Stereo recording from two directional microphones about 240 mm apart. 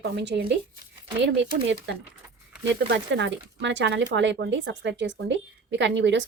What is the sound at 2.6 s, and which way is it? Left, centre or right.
Speech, right.